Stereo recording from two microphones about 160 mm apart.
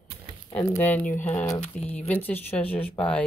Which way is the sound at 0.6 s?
10° left (ahead or behind).